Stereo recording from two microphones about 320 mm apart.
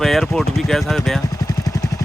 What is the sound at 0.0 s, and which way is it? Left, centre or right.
Speech, centre.